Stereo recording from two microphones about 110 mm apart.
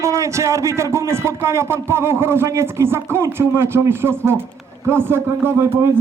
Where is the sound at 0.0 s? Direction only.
25° right (ahead or behind).